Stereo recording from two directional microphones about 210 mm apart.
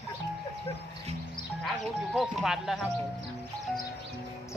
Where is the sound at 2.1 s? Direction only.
Centre (ahead or behind).